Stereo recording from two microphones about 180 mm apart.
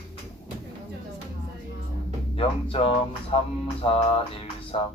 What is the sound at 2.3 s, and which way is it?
Speech, 30° left (ahead or behind).